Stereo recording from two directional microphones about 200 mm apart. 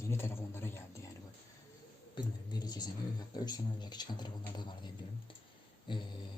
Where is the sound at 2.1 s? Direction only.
20° left (ahead or behind).